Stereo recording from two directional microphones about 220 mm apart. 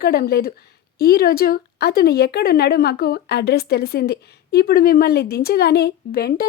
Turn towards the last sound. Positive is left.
turn(degrees=45)  # may be behind; listen again after turning